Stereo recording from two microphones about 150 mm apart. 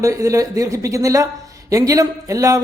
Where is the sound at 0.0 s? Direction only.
20° right (ahead or behind).